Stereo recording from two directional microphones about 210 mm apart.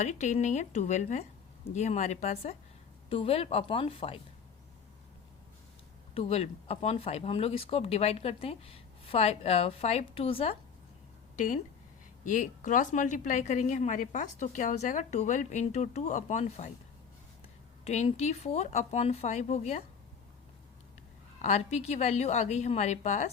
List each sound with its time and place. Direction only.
0.0 s a woman's voice: 35° left (ahead or behind)
6.1 s speech: 30° left (ahead or behind)
11.3 s a woman's voice: 40° left (ahead or behind)
17.8 s a woman's voice: 30° left (ahead or behind)
21.4 s a woman's voice: 30° left (ahead or behind)